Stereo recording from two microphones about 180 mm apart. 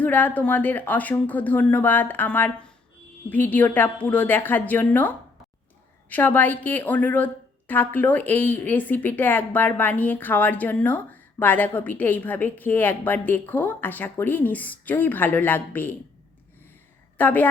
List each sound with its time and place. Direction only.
0.0 s speech: 10° left (ahead or behind)
17.2 s speech: 10° left (ahead or behind)